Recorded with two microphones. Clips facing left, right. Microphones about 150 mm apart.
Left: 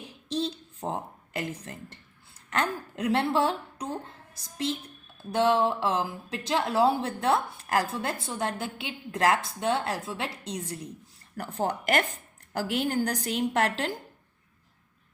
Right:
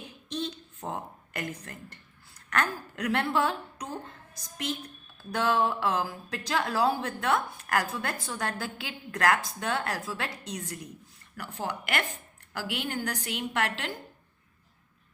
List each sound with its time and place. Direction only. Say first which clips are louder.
0.3 s a sound: left 4 dB; 30° left (ahead or behind)
2.5 s a woman's voice: left 1 dB; 25° left (ahead or behind)
11.3 s a woman's voice: left 5 dB; 40° left (ahead or behind)